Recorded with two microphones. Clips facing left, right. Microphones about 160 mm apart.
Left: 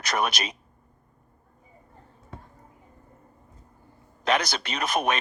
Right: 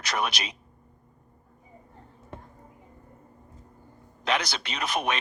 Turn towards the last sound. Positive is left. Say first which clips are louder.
# left 3 dB
turn(degrees=45)  # may be behind; listen again after turning